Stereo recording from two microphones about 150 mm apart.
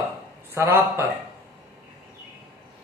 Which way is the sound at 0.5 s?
15° right (ahead or behind).